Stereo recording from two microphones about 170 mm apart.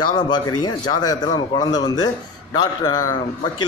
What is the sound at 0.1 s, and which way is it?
A man's voice, 25° left (ahead or behind).